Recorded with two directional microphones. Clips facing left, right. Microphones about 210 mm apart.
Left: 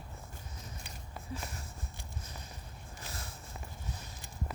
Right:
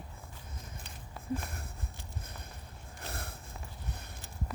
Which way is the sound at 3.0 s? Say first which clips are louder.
Right 4 dB; 60° right (ahead or behind).